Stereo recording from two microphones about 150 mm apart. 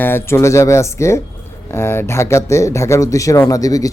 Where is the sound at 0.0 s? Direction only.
15° left (ahead or behind).